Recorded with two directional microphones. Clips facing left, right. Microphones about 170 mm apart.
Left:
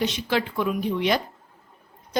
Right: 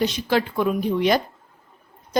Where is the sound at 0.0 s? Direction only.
40° right (ahead or behind).